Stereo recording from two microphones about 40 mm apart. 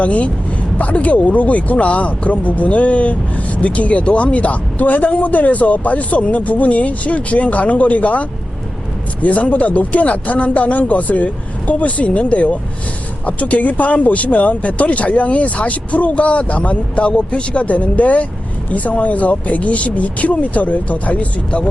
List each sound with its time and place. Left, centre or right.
0.0 s speech: left